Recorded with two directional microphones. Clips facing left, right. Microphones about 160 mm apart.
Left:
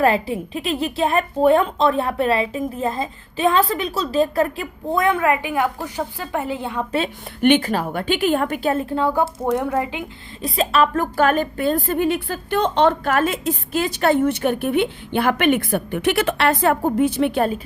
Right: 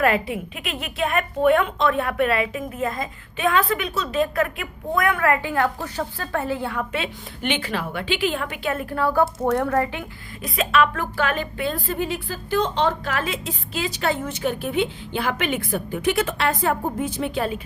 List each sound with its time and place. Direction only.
0.0 s a woman's voice: 30° left (ahead or behind)
6.9 s a woman's voice: 45° left (ahead or behind)
8.7 s a woman's voice: 25° left (ahead or behind)
10.4 s a woman's voice: 30° left (ahead or behind); by 17.4 s 65° left (ahead or behind)